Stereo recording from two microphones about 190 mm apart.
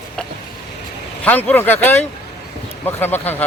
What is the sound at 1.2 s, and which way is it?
Speech, 10° left (ahead or behind).